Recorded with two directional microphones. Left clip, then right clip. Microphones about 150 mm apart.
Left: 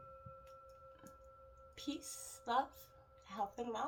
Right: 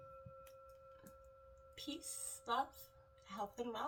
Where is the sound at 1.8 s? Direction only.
45° left (ahead or behind).